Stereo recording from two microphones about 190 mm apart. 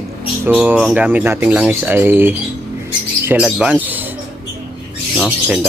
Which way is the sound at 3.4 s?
5° right (ahead or behind).